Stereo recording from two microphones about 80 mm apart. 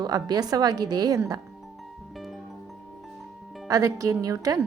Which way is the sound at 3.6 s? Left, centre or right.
Right.